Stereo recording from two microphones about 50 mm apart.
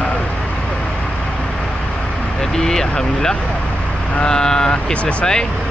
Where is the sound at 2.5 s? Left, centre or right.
Centre.